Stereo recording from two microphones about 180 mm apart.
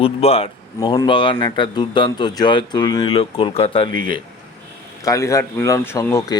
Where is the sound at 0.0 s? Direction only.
35° left (ahead or behind).